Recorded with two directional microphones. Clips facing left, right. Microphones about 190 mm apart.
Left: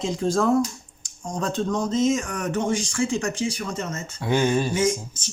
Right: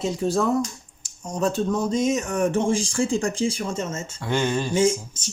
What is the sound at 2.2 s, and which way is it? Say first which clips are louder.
Speech: right 4 dB; 25° right (ahead or behind).